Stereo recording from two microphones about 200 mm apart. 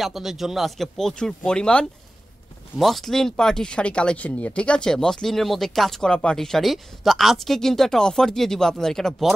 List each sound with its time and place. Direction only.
0.0 s speech: centre (ahead or behind)